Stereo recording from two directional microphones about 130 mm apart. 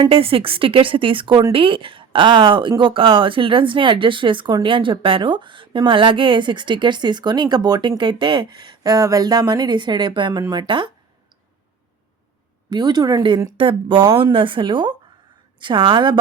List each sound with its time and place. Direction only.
0.0 s speech: 45° right (ahead or behind)
12.7 s speech: 35° right (ahead or behind)